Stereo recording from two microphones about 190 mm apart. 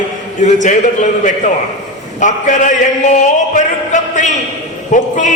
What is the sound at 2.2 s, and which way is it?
Speech, 40° left (ahead or behind).